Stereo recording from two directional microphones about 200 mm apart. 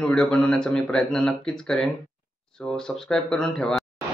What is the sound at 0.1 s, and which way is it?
Speech, 5° left (ahead or behind).